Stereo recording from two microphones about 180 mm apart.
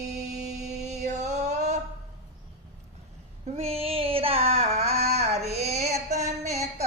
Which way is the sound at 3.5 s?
35° right (ahead or behind).